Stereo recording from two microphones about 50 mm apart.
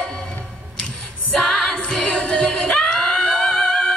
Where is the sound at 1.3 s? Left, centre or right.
Centre.